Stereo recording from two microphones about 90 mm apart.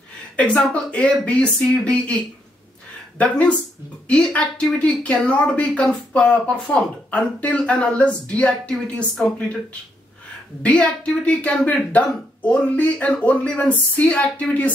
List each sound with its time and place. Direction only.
0.4 s speech: 10° left (ahead or behind)